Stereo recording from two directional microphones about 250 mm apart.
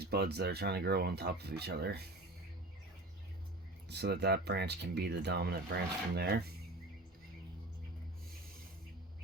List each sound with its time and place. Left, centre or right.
0.0 s speech: right
3.8 s speech: right